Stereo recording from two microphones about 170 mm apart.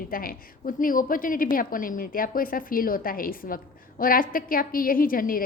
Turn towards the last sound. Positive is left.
turn(degrees=55)  # may be behind; listen again after turning